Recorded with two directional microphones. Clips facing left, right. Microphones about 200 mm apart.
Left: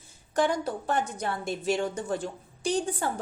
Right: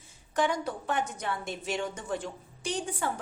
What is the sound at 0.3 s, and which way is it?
A woman's voice, 35° left (ahead or behind).